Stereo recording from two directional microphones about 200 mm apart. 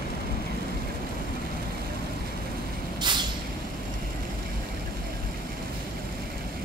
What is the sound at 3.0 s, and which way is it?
Vehicle, 20° right (ahead or behind).